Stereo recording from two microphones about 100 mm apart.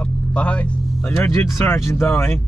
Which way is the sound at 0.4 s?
10° left (ahead or behind).